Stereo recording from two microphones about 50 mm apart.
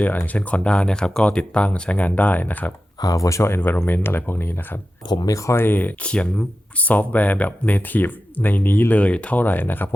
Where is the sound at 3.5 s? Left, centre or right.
Left.